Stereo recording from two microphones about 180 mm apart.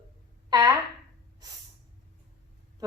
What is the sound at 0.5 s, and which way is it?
Speech, 20° right (ahead or behind).